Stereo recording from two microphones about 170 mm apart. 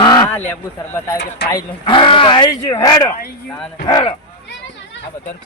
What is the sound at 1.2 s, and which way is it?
Speech, 90° left.